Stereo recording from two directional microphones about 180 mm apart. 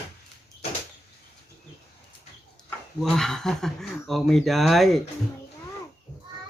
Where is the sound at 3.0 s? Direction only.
Centre (ahead or behind).